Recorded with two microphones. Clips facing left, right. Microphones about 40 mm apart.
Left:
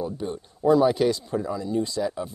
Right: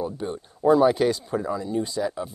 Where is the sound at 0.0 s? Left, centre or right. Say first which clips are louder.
Right 1 dB; centre.